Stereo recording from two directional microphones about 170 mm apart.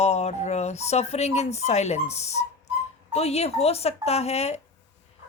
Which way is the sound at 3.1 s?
35° left (ahead or behind).